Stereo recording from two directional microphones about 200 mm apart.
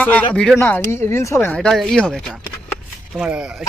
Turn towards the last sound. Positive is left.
turn(degrees=-5)  # may be behind; listen again after turning